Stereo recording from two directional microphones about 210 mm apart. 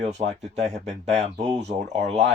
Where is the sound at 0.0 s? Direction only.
30° right (ahead or behind).